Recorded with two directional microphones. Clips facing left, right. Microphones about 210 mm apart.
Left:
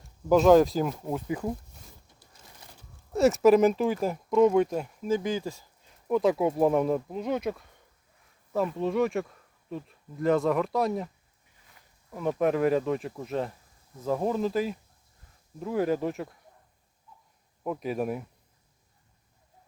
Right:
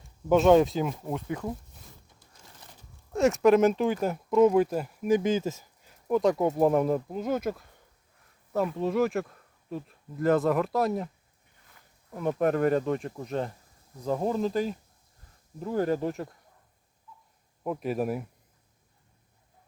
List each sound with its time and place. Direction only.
0.3 s speech: centre (ahead or behind)
3.1 s speech: centre (ahead or behind)
5.0 s speech: 20° right (ahead or behind)
5.8 s speech: centre (ahead or behind)
12.1 s speech: centre (ahead or behind)
17.6 s speech: centre (ahead or behind)